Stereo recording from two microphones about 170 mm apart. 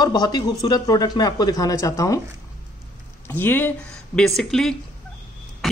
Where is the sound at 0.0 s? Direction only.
25° left (ahead or behind).